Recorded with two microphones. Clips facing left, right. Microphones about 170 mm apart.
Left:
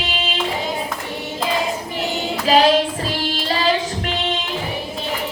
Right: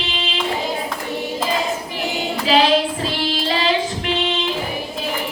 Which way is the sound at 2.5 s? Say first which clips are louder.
Left 1 dB; 45° left (ahead or behind).